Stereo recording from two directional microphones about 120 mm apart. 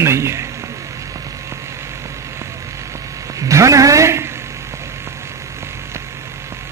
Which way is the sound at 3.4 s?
25° right (ahead or behind).